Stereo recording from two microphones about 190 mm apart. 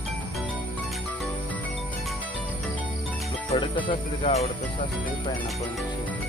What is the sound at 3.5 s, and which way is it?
Speech, 30° left (ahead or behind).